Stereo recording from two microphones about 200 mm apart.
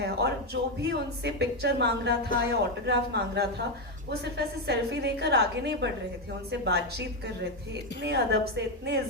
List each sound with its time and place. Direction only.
0.0 s a woman's voice: 55° right (ahead or behind)
8.0 s a woman's voice: 55° right (ahead or behind)